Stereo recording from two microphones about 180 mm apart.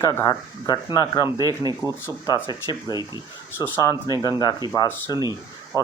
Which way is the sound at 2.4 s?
25° left (ahead or behind).